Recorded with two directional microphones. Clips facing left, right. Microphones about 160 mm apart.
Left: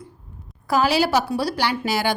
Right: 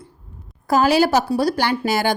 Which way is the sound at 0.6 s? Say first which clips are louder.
Right 4 dB; 45° right (ahead or behind).